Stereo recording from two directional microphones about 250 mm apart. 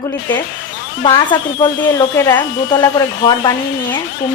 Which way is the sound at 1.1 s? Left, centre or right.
Centre.